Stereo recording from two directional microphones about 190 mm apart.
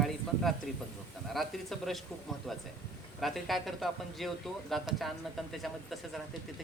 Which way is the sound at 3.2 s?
Centre (ahead or behind).